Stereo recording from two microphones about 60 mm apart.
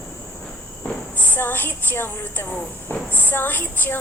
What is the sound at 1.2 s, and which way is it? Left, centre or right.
A woman's voice, left.